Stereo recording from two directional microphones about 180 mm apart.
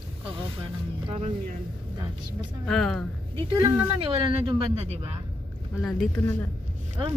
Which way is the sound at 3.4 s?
30° right (ahead or behind).